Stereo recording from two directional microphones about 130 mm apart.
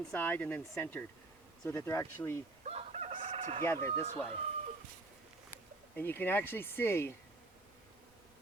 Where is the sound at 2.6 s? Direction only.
60° right (ahead or behind).